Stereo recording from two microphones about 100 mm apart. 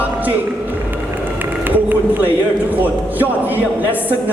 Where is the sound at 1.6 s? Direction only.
20° right (ahead or behind).